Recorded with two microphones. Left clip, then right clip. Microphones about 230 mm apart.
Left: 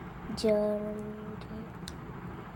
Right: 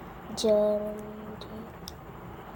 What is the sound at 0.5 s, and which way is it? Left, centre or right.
Speech, left.